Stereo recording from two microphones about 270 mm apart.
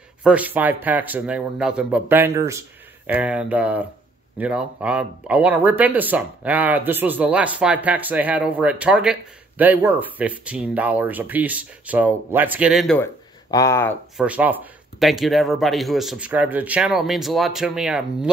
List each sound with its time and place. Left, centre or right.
0.2 s speech: centre
14.1 s speech: centre